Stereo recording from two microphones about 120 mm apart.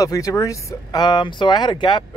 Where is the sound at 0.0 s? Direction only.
25° left (ahead or behind).